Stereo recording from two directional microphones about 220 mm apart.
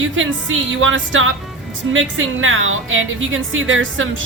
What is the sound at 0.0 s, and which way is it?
A woman's voice, 60° right (ahead or behind).